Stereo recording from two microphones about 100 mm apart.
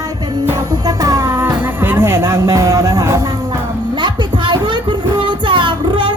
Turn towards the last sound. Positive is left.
turn(degrees=-55)  # may be behind; listen again after turning